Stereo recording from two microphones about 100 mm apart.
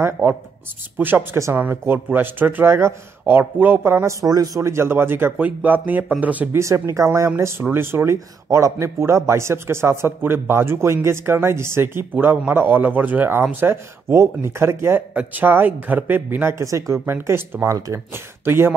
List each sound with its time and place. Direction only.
0.0 s a man's voice: 25° right (ahead or behind)
6.6 s a man's voice: 30° right (ahead or behind)